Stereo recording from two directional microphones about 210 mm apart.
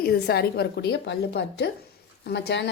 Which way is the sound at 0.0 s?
50° left (ahead or behind).